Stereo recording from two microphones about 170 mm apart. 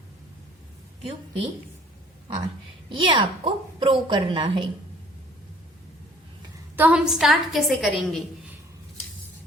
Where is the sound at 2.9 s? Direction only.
30° right (ahead or behind).